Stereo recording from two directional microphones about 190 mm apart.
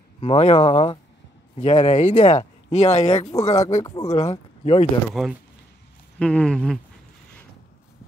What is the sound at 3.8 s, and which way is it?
Speech, 20° left (ahead or behind).